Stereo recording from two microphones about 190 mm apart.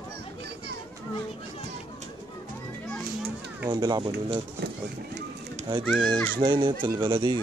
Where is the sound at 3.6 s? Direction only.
20° right (ahead or behind).